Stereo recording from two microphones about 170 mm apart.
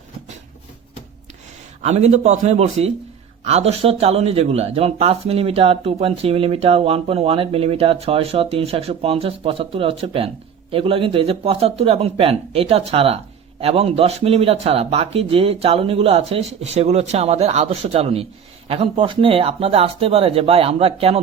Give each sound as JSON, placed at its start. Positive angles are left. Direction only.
{"t": 1.8, "sound": "speech", "side_deg": -40}